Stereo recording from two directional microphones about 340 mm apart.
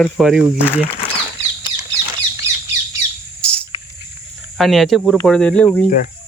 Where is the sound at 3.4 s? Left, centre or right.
Centre.